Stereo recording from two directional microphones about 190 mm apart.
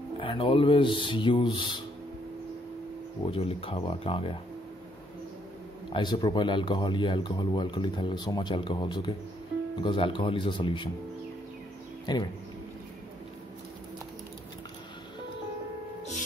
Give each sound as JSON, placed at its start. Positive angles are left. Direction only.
{"t": 0.2, "sound": "speech", "side_deg": 30}
{"t": 3.3, "sound": "speech", "side_deg": 30}
{"t": 5.9, "sound": "speech", "side_deg": 25}
{"t": 12.1, "sound": "speech", "side_deg": 25}